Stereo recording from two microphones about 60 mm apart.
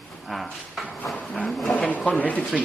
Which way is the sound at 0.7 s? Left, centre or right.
Centre.